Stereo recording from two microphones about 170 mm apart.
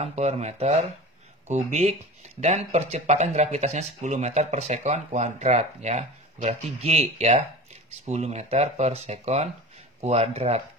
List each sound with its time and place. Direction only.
0.0 s speech: 40° right (ahead or behind)